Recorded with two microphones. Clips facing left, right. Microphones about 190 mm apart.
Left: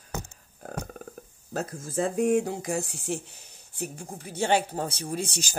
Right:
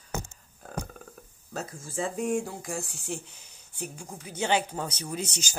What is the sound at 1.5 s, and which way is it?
Speech, 45° left (ahead or behind).